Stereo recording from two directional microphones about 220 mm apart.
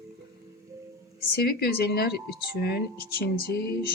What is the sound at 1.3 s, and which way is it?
Speech, 45° left (ahead or behind).